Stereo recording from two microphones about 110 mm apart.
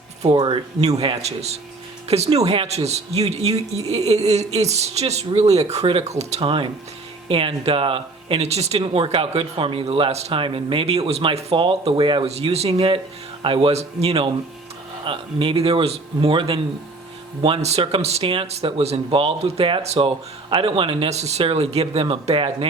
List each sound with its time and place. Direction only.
0.3 s speech: 40° right (ahead or behind)
0.8 s speech: 70° right (ahead or behind)
7.3 s a man's voice: 55° right (ahead or behind); by 8.8 s 75° right (ahead or behind)
8.8 s a man's voice: 55° right (ahead or behind)
12.3 s a man's voice: 70° right (ahead or behind)
15.0 s a man's voice: 50° right (ahead or behind)
17.6 s speech: 80° right
17.9 s a man's voice: 65° right (ahead or behind)
20.1 s speech: 50° right (ahead or behind)
21.1 s speech: 75° right (ahead or behind)
21.4 s speech: 65° right (ahead or behind)
22.0 s a man's voice: 55° right (ahead or behind)